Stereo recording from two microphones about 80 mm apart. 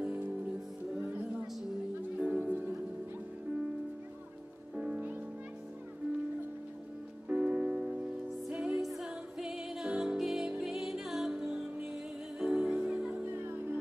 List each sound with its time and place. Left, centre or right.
0.0 s music: right
2.1 s music: centre
4.7 s music: centre
7.2 s music: centre
13.2 s music: right